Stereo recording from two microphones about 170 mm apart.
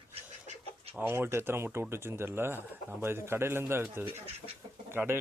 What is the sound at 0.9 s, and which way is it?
Speech, 10° right (ahead or behind).